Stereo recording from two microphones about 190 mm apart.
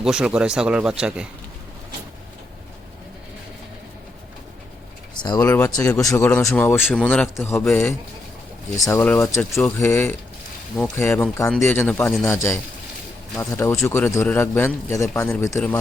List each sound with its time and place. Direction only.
0.0 s speech: 5° right (ahead or behind)
5.1 s speech: 20° left (ahead or behind)
9.5 s speech: centre (ahead or behind)
9.7 s speech: 15° left (ahead or behind)
13.4 s speech: 15° left (ahead or behind)